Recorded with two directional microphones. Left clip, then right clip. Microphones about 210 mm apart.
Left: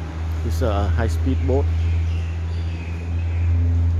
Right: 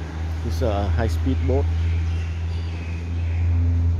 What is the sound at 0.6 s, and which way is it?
Speech, 5° right (ahead or behind).